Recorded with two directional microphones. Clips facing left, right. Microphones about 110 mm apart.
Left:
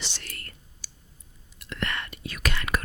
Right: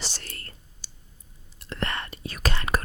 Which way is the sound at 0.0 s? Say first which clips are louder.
Right 2 dB; 40° right (ahead or behind).